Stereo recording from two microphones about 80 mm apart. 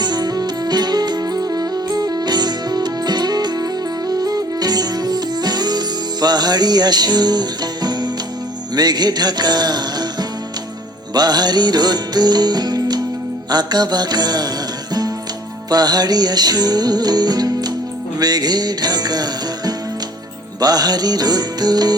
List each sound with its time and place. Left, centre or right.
0.0 s music: right
15.7 s music: right